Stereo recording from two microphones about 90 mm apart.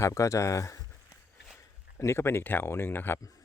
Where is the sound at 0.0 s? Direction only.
35° left (ahead or behind).